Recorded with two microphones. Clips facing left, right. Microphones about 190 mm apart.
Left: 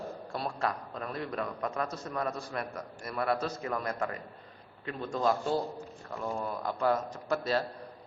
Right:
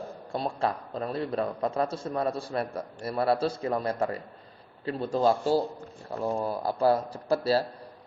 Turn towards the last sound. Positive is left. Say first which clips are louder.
# right 5 dB
turn(degrees=-35)  # may be behind; listen again after turning